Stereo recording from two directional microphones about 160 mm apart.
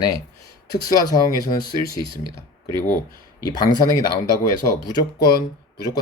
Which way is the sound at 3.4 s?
25° left (ahead or behind).